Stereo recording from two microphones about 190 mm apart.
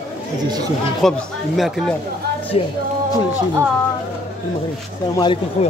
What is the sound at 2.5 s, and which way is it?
Music, 30° left (ahead or behind).